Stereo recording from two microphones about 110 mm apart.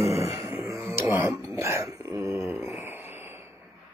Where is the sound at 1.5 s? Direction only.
25° right (ahead or behind).